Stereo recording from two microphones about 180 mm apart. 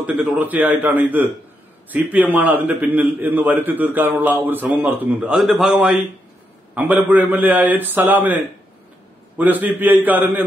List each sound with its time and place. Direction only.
0.0 s a man's voice: 5° right (ahead or behind)
9.4 s a man's voice: 10° right (ahead or behind)